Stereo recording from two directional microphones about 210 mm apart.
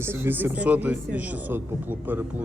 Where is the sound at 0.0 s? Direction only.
10° right (ahead or behind).